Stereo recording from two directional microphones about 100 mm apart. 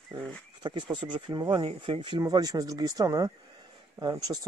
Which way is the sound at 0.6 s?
50° right (ahead or behind).